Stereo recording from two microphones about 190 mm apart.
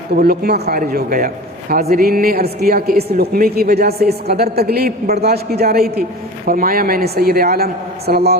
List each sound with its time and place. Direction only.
0.2 s a woman's voice: 55° right (ahead or behind)